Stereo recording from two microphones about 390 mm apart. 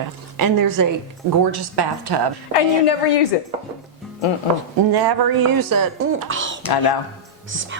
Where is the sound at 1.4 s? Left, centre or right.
Right.